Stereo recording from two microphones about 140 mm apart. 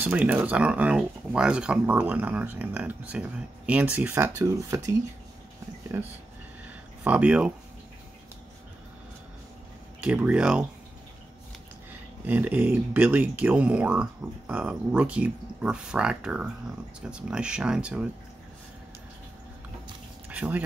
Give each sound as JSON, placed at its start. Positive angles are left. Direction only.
{"t": 0.0, "sound": "speech", "side_deg": -10}
{"t": 9.9, "sound": "speech", "side_deg": -10}
{"t": 12.3, "sound": "speech", "side_deg": -15}
{"t": 20.2, "sound": "speech", "side_deg": -10}